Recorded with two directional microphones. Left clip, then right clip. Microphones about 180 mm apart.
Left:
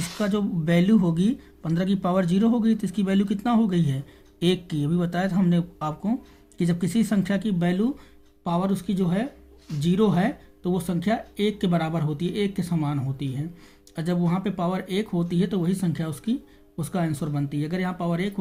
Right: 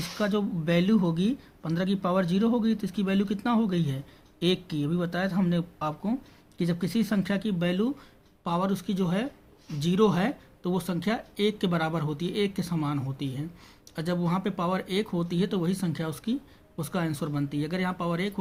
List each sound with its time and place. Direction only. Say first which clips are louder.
0.2 s speech: left 1 dB; 20° right (ahead or behind)